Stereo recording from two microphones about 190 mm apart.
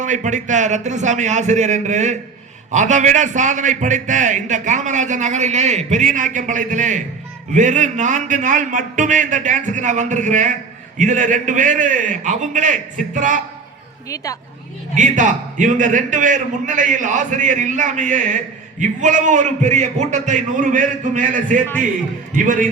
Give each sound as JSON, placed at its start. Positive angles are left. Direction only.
{"t": 0.0, "sound": "a man's voice", "side_deg": -40}
{"t": 14.9, "sound": "a man's voice", "side_deg": -40}